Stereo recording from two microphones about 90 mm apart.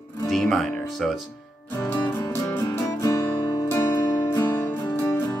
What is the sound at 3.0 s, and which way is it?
Music, 40° left (ahead or behind).